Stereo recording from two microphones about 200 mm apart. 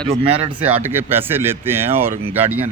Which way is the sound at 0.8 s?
10° right (ahead or behind).